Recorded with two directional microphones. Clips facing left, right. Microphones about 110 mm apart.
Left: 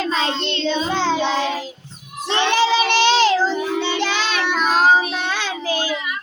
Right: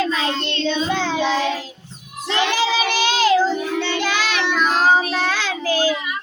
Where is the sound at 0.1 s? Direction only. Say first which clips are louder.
Left 1 dB; 30° left (ahead or behind).